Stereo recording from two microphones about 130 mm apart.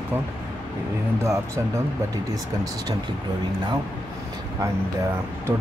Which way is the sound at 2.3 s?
30° right (ahead or behind).